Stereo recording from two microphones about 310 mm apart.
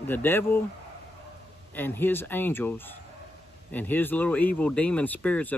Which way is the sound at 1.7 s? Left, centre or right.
Centre.